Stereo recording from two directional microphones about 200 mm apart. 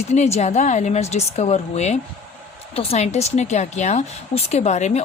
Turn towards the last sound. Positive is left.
turn(degrees=35)  # may be behind; listen again after turning